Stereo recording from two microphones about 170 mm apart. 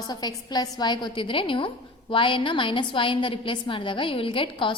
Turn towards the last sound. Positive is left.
turn(degrees=30)  # may be behind; listen again after turning